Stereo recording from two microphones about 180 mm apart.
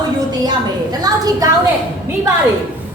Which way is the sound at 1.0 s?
20° right (ahead or behind).